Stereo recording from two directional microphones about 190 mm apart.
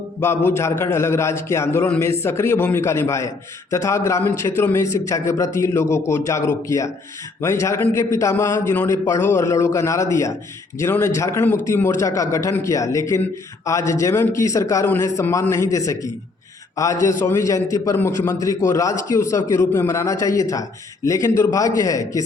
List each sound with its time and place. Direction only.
0.2 s a man's voice: 15° left (ahead or behind)